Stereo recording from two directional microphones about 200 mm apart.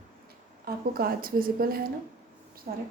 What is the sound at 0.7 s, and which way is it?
A woman's voice, 50° right (ahead or behind).